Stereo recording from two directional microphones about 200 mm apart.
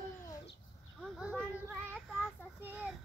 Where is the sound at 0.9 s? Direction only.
Centre (ahead or behind).